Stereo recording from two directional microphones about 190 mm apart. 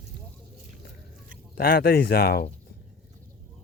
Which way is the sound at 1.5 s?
50° left (ahead or behind).